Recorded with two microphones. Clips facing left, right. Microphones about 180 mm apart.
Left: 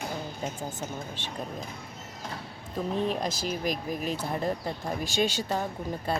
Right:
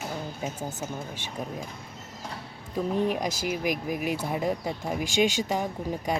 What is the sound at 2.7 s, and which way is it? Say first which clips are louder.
Speech: right 2 dB; 15° right (ahead or behind).